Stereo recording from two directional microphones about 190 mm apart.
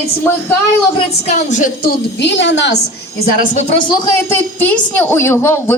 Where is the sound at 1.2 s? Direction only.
40° left (ahead or behind).